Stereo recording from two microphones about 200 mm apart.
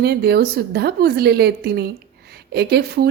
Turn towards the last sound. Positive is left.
turn(degrees=-55)  # may be behind; listen again after turning